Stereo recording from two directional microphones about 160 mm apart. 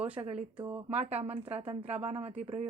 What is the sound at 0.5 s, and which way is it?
Speech, 10° right (ahead or behind).